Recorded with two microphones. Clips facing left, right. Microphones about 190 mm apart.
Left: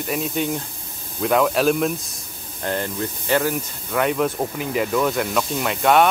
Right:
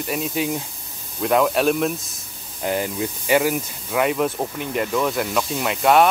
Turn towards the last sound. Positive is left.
turn(degrees=0)  # may be behind; listen again after turning